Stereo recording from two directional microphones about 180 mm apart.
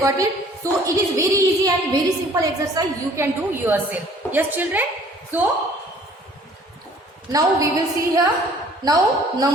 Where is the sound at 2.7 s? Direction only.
15° right (ahead or behind).